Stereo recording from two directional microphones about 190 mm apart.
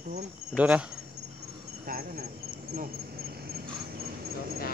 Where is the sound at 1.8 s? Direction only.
55° right (ahead or behind).